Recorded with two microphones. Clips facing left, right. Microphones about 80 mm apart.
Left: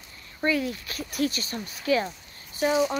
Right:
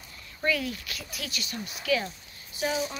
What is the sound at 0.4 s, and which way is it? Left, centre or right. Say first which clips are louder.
Speech: left 3 dB; left.